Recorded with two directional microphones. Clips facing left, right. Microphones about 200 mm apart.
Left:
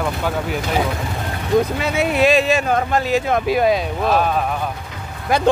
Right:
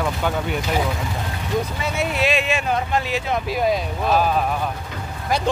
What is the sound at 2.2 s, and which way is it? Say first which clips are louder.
Speech: left 8 dB; 40° left (ahead or behind).